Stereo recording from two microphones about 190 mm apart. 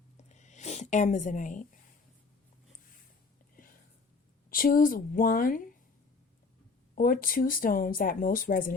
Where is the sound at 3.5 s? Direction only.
50° left (ahead or behind).